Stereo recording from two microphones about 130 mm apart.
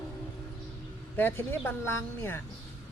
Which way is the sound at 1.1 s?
15° left (ahead or behind).